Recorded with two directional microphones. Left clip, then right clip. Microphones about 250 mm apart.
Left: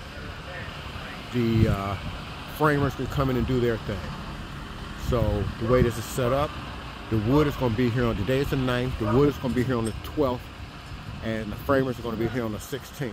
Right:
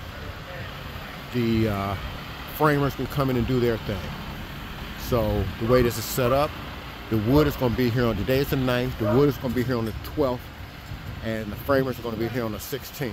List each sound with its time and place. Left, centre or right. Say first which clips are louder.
1.5 s speech: right 3 dB; centre
5.1 s speech: right 2 dB; centre